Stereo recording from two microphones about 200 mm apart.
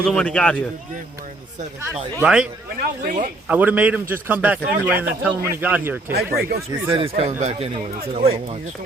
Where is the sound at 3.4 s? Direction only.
10° right (ahead or behind).